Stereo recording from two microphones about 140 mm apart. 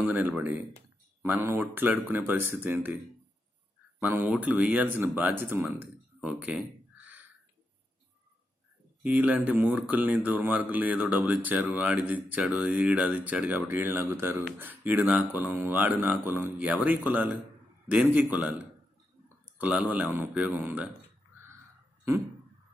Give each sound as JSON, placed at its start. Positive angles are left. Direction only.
{"t": 0.0, "sound": "speech", "side_deg": -10}
{"t": 4.0, "sound": "speech", "side_deg": -15}
{"t": 9.0, "sound": "speech", "side_deg": -10}